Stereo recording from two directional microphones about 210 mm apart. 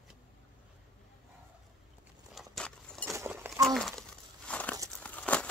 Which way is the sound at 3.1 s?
10° right (ahead or behind).